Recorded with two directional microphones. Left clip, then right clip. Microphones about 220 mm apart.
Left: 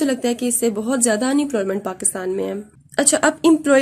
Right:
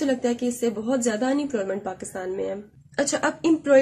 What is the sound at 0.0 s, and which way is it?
A woman's voice, 45° left (ahead or behind).